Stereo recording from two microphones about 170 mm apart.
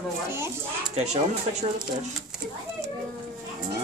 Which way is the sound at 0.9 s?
40° right (ahead or behind).